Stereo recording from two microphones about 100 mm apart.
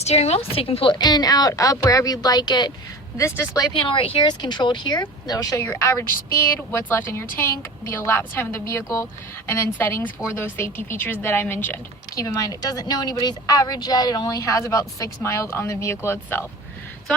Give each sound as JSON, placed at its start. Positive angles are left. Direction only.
{"t": 0.0, "sound": "a woman's voice", "side_deg": 90}
{"t": 0.9, "sound": "speech", "side_deg": 45}
{"t": 3.2, "sound": "speech", "side_deg": 25}
{"t": 3.7, "sound": "speech", "side_deg": 55}
{"t": 5.6, "sound": "a woman's voice", "side_deg": 25}